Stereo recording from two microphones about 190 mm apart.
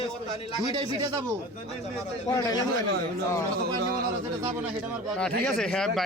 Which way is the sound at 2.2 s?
20° left (ahead or behind).